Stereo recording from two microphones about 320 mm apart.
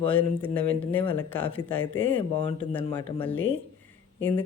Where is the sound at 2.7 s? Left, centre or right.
Centre.